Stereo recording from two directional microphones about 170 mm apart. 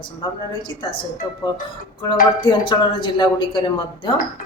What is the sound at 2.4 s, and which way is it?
A woman's voice, 30° left (ahead or behind).